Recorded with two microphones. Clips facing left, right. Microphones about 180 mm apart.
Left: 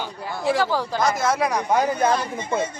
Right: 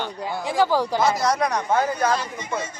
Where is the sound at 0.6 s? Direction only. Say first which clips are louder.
Right 3 dB; 15° right (ahead or behind).